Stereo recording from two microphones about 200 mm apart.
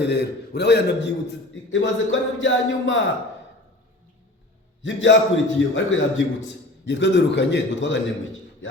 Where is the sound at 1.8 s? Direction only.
70° left (ahead or behind).